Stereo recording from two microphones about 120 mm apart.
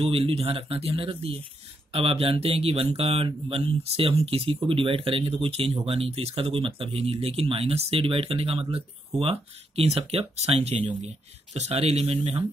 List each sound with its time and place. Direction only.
0.0 s speech: 55° right (ahead or behind)